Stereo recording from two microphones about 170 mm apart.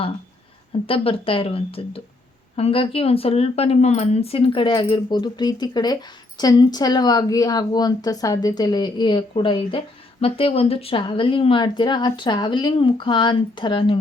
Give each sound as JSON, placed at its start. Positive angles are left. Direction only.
{"t": 0.7, "sound": "speech", "side_deg": 35}